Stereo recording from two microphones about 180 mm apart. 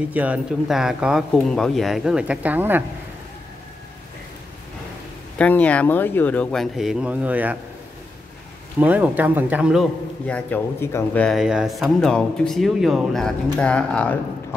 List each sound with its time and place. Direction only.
0.1 s speech: 10° right (ahead or behind)
5.4 s speech: 10° left (ahead or behind); by 7.5 s 10° right (ahead or behind)
8.7 s speech: 10° right (ahead or behind)
10.2 s speech: 10° left (ahead or behind)
11.2 s speech: centre (ahead or behind)